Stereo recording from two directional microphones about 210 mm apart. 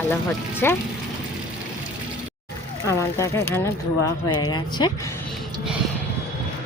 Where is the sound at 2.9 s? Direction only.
15° left (ahead or behind).